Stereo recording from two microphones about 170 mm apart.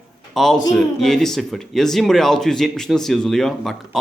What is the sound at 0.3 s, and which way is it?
Speech, centre (ahead or behind).